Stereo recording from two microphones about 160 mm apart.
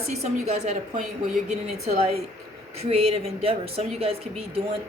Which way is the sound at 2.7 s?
40° right (ahead or behind).